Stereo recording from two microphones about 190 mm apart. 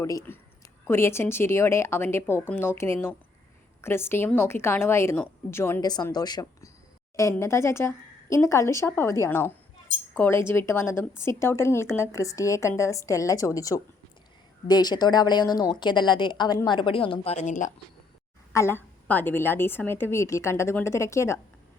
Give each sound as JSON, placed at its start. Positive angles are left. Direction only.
{"t": 0.0, "sound": "a woman's voice", "side_deg": 15}
{"t": 18.5, "sound": "speech", "side_deg": 15}